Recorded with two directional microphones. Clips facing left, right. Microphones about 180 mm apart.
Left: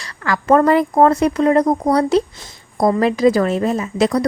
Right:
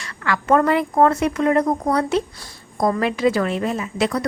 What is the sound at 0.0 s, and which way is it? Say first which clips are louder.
A woman's voice: left 2 dB; 35° left (ahead or behind).